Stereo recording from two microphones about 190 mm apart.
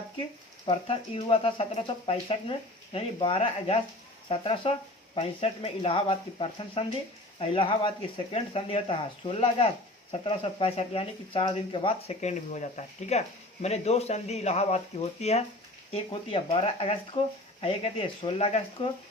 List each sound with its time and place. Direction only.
0.6 s speech: 30° left (ahead or behind)